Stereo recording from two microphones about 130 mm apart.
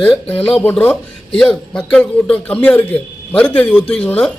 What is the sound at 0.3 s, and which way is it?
A man's voice, 15° left (ahead or behind).